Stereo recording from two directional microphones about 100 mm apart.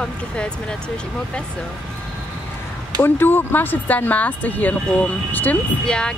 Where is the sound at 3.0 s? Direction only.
20° left (ahead or behind).